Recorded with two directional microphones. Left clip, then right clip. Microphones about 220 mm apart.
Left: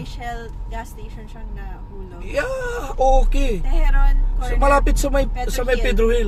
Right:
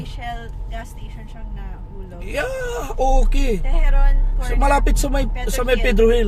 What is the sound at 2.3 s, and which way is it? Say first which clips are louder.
Speech: left 1 dB; 20° right (ahead or behind).